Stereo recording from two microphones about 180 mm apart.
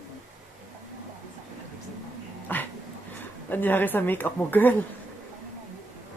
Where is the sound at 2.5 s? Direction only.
10° left (ahead or behind).